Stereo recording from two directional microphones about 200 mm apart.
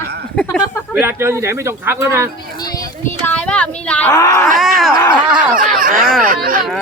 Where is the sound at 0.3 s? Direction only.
5° left (ahead or behind).